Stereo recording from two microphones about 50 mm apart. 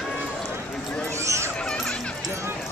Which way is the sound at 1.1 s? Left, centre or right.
Right.